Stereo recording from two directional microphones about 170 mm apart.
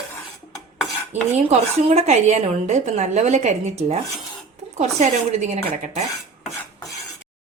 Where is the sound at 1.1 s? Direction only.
40° right (ahead or behind).